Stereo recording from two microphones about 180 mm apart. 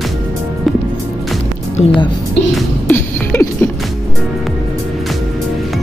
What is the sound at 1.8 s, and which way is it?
Speech, 35° left (ahead or behind).